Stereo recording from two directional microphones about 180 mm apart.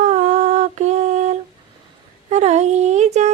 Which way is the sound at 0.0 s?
40° right (ahead or behind).